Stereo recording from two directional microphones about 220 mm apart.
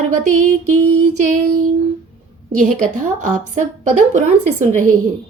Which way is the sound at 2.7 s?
35° right (ahead or behind).